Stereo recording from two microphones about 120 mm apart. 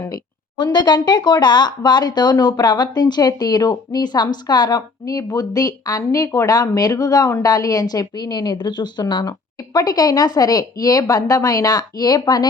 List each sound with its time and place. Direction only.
0.0 s a woman's voice: 35° left (ahead or behind)